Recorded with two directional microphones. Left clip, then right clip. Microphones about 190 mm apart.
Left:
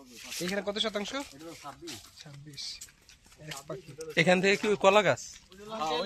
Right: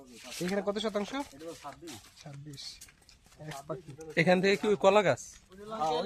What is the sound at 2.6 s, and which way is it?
Speech, 60° right (ahead or behind).